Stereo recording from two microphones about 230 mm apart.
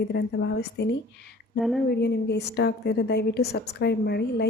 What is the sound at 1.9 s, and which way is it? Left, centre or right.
Speech, left.